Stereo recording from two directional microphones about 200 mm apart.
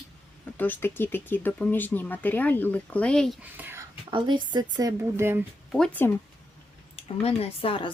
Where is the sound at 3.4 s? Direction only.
10° right (ahead or behind).